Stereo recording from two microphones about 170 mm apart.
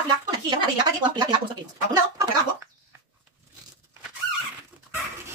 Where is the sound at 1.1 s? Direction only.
25° right (ahead or behind).